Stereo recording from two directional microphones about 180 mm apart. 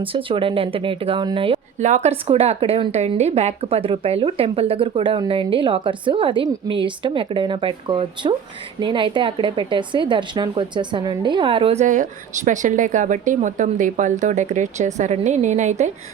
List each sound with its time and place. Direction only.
0.0 s a woman's voice: 30° right (ahead or behind)
1.8 s a woman's voice: 40° right (ahead or behind)